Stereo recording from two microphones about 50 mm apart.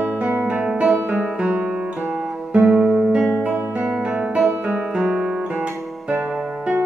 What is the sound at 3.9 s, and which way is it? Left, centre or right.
Music, right.